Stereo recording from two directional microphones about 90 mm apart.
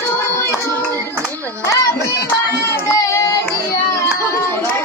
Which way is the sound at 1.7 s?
35° left (ahead or behind).